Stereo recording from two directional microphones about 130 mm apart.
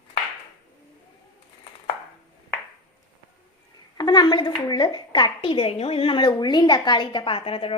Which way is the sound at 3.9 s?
30° left (ahead or behind).